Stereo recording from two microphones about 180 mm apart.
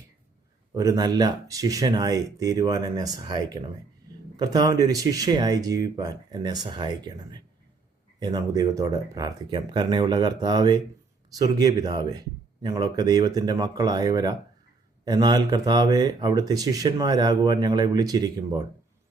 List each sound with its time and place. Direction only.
0.7 s speech: 20° right (ahead or behind)